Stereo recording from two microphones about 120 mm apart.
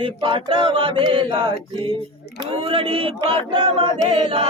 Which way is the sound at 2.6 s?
50° right (ahead or behind).